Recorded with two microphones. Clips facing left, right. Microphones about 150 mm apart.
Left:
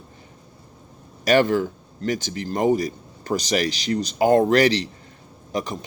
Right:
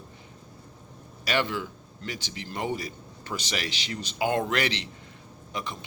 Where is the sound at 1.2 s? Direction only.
45° left (ahead or behind).